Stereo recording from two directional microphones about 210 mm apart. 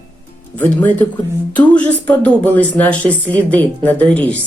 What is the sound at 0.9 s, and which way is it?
Speech, 5° left (ahead or behind).